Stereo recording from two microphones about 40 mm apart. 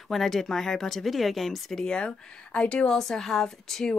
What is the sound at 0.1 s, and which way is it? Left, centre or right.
Speech, centre.